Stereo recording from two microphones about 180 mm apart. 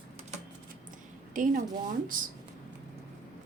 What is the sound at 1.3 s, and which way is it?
Speech, 45° right (ahead or behind).